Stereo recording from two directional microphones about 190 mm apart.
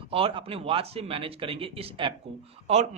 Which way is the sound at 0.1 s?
30° right (ahead or behind).